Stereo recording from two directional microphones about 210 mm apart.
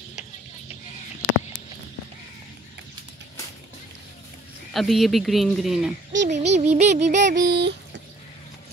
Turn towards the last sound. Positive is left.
turn(degrees=-55)  # may be behind; listen again after turning